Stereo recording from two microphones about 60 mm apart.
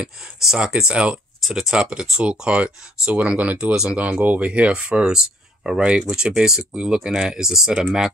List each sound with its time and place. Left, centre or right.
0.0 s speech: centre